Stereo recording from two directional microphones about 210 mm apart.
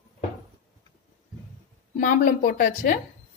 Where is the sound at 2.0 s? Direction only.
40° left (ahead or behind).